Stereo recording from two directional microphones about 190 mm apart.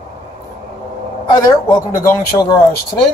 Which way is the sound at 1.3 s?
15° left (ahead or behind).